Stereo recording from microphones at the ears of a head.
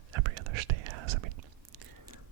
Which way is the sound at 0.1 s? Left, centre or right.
Right.